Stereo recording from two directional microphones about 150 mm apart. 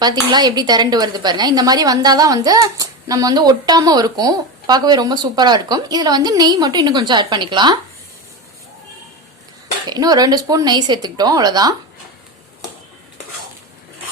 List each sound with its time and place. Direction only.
0.0 s a woman's voice: 25° right (ahead or behind)
9.9 s a woman's voice: 25° right (ahead or behind)